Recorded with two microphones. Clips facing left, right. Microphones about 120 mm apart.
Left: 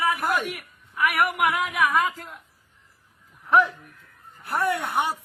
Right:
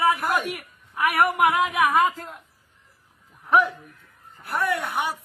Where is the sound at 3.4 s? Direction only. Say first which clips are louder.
Even; 5° right (ahead or behind).